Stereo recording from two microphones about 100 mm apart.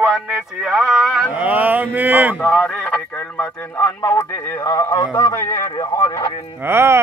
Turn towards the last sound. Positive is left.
turn(degrees=-25)  # may be behind; listen again after turning